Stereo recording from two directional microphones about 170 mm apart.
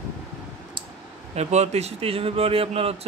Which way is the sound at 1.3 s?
40° right (ahead or behind).